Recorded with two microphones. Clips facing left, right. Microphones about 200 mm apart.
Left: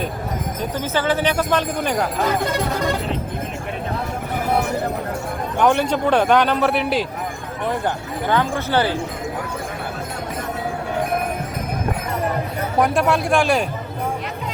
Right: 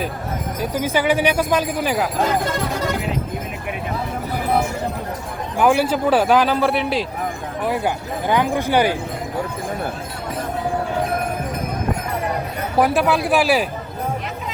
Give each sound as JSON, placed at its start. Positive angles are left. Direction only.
{"t": 0.6, "sound": "speech", "side_deg": -10}
{"t": 5.5, "sound": "a man's voice", "side_deg": -5}
{"t": 12.8, "sound": "a man's voice", "side_deg": -5}